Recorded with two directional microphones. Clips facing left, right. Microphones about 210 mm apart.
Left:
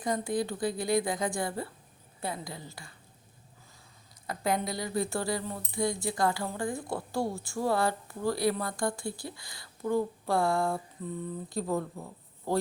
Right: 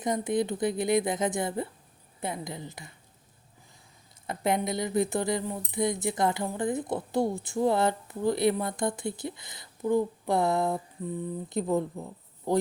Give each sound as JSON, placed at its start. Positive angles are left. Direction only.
{"t": 0.0, "sound": "speech", "side_deg": -20}
{"t": 4.3, "sound": "speech", "side_deg": -20}